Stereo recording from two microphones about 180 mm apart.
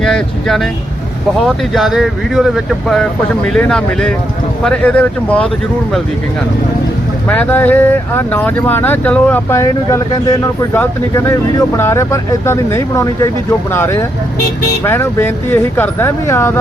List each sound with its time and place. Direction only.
0.0 s speech: 5° left (ahead or behind)
1.7 s speech: centre (ahead or behind)
3.5 s speech: 5° left (ahead or behind)
7.3 s speech: 10° left (ahead or behind)